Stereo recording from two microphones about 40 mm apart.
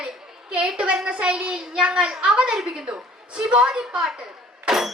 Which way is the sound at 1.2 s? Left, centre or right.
Right.